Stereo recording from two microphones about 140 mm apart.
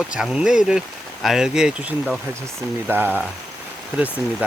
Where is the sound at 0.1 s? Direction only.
5° right (ahead or behind).